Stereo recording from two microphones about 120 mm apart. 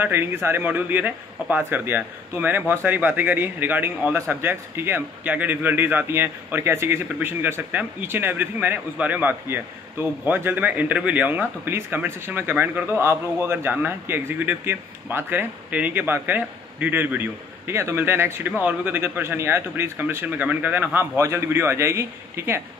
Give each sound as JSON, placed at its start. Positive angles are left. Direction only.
{"t": 0.0, "sound": "a man's voice", "side_deg": -20}